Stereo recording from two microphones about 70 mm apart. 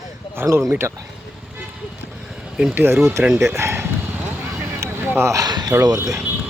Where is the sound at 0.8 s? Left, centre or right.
Right.